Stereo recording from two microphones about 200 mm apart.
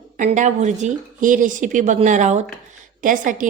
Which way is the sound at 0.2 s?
40° right (ahead or behind).